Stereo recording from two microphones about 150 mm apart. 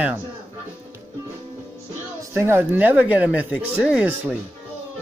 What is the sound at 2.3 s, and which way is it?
Speech, 15° right (ahead or behind).